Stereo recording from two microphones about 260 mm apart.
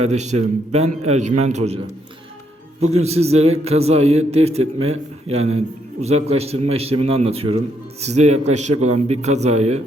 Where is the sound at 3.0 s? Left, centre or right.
Right.